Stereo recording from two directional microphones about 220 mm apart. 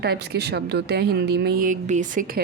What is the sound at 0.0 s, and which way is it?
Speech, 50° right (ahead or behind).